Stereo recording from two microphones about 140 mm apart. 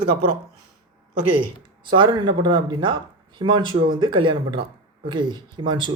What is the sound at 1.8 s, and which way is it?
Speech, 35° right (ahead or behind).